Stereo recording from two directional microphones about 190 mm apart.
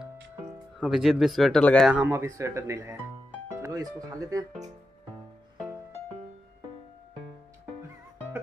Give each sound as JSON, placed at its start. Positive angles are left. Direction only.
{"t": 0.7, "sound": "speech", "side_deg": 0}
{"t": 1.9, "sound": "speech", "side_deg": -10}